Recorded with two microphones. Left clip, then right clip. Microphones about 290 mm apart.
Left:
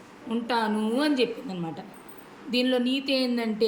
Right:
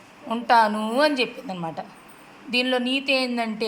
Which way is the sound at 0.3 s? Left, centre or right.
Centre.